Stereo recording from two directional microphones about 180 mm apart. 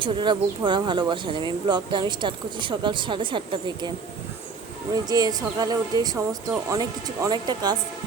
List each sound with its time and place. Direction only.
0.0 s speech: 25° right (ahead or behind)
5.0 s speech: 20° right (ahead or behind)